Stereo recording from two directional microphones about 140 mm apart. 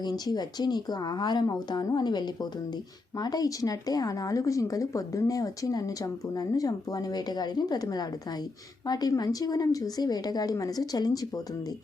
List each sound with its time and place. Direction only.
0.0 s a woman's voice: 30° left (ahead or behind)